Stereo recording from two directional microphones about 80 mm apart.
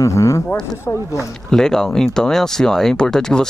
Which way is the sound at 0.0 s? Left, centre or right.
Left.